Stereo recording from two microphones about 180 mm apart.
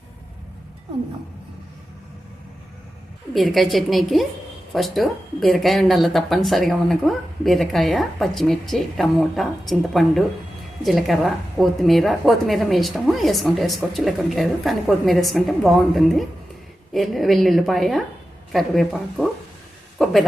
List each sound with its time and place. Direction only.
3.3 s speech: centre (ahead or behind)